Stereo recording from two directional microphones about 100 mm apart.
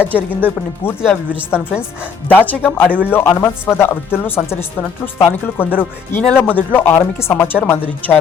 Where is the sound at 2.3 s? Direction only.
20° left (ahead or behind).